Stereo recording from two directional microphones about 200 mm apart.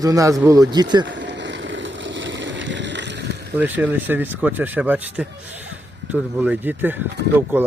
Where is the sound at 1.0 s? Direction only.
60° right (ahead or behind).